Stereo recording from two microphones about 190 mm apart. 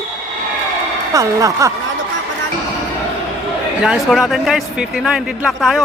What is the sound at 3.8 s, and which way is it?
A man's voice, centre (ahead or behind).